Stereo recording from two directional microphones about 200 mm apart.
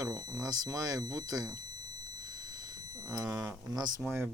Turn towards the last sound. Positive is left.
turn(degrees=-10)  # may be behind; listen again after turning